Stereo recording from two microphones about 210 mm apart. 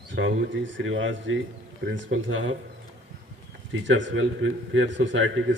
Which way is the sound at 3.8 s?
60° right (ahead or behind).